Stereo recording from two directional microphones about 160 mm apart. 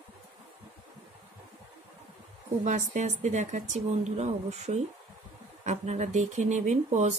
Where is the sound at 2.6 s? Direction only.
50° right (ahead or behind).